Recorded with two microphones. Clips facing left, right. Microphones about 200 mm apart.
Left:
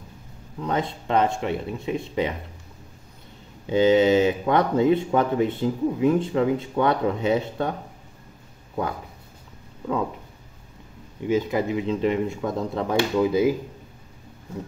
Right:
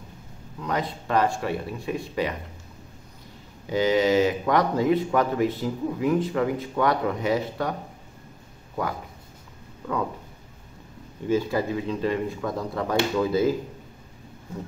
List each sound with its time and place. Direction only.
0.6 s speech: 25° left (ahead or behind)
3.6 s speech: 25° left (ahead or behind)
11.2 s speech: 15° left (ahead or behind)